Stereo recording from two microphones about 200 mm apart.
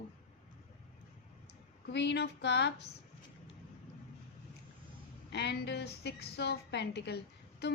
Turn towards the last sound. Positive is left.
turn(degrees=55)  # may be behind; listen again after turning